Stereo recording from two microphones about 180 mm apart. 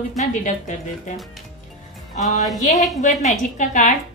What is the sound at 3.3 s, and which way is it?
Speech, 45° left (ahead or behind).